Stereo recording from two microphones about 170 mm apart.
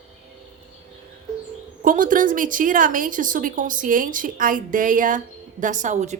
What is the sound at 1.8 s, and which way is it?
A woman's voice, 50° right (ahead or behind).